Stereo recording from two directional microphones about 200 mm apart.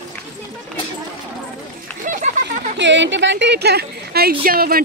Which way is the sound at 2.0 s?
40° right (ahead or behind).